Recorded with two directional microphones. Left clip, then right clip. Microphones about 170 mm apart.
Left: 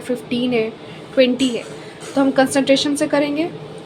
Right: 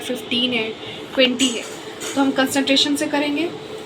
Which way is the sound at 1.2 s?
75° left (ahead or behind).